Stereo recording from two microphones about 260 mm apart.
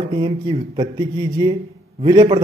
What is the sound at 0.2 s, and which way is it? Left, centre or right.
Speech, centre.